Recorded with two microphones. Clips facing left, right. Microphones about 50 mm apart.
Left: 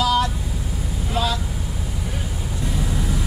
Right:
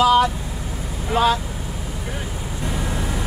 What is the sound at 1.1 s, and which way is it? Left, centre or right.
Speech, right.